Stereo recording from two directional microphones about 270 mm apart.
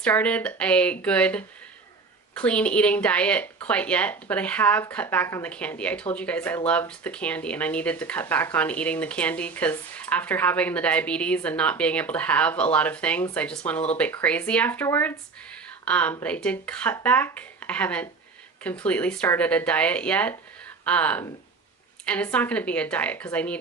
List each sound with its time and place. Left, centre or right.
0.0 s speech: centre